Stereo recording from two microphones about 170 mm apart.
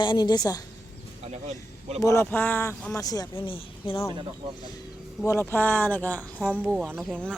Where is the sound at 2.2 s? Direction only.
10° left (ahead or behind).